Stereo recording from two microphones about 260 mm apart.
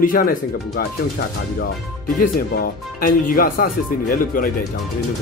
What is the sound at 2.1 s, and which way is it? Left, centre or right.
Speech, left.